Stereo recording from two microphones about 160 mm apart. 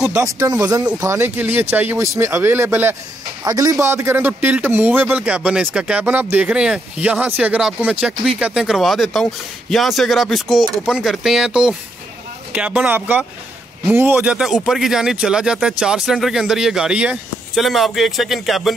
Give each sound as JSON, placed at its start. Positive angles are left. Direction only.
{"t": 0.2, "sound": "speech", "side_deg": -20}